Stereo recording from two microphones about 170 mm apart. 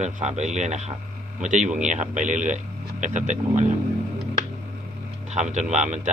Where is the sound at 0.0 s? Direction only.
45° right (ahead or behind).